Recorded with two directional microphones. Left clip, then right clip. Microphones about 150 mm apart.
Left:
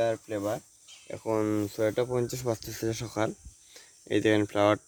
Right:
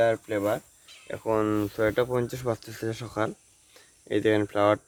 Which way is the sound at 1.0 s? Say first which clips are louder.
Right 3 dB; 20° left (ahead or behind).